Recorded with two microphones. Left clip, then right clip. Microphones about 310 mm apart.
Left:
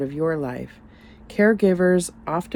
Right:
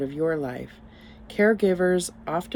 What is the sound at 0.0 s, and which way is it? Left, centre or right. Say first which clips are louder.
Speech: left 2 dB; centre.